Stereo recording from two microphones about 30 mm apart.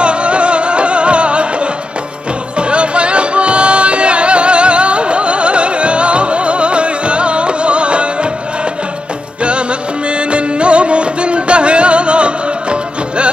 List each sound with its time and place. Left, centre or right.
0.0 s music: right
2.7 s music: right
10.3 s music: right